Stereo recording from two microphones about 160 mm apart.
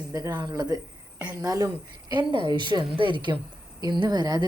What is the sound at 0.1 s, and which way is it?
A woman's voice, 20° right (ahead or behind).